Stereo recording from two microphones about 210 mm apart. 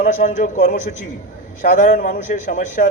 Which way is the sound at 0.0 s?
35° left (ahead or behind).